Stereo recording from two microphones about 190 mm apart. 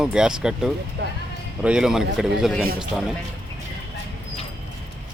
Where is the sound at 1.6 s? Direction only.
5° right (ahead or behind).